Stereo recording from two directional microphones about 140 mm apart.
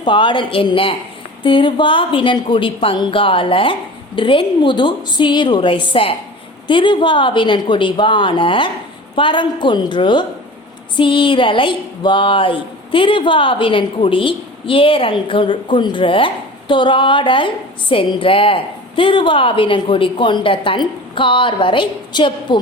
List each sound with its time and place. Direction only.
0.0 s speech: 35° left (ahead or behind)